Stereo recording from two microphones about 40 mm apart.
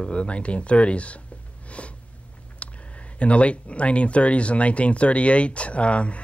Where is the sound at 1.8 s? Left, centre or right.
Left.